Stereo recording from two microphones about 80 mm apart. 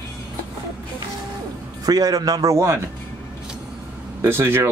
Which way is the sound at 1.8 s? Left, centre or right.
Right.